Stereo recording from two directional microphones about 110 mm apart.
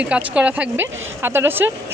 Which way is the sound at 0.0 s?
10° right (ahead or behind).